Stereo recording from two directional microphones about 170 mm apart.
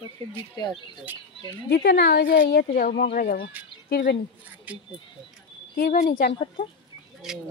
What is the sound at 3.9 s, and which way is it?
Speech, 80° left.